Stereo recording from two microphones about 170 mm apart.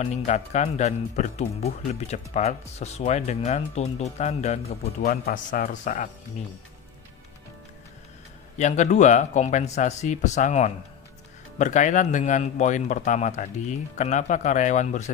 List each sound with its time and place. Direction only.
0.0 s speech: 40° left (ahead or behind)
5.0 s a man's voice: 60° left (ahead or behind)
8.5 s speech: 45° left (ahead or behind)